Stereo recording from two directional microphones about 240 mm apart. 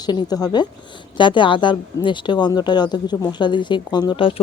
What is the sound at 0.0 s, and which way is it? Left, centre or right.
Speech, centre.